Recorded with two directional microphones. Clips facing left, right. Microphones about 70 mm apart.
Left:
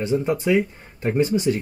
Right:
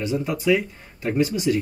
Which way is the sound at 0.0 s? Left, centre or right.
Left.